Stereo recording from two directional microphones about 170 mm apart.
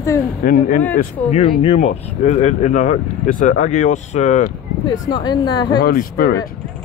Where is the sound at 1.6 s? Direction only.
40° left (ahead or behind).